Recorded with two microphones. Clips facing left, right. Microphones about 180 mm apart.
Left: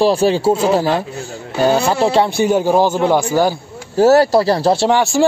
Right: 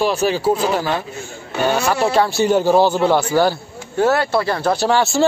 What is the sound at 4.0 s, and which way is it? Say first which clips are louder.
Speech: left 6 dB; 40° left (ahead or behind).